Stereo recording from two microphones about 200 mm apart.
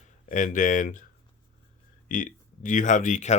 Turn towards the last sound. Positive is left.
turn(degrees=35)  # may be behind; listen again after turning